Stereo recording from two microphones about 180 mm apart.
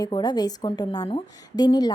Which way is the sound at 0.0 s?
25° left (ahead or behind).